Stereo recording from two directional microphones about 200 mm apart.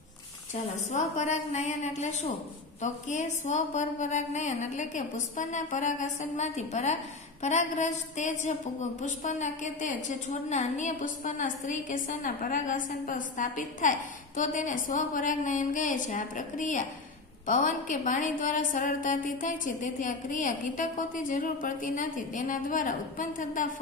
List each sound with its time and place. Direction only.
0.9 s a woman's voice: 35° left (ahead or behind)